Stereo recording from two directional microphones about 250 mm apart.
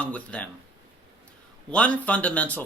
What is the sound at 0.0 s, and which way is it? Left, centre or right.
Speech, centre.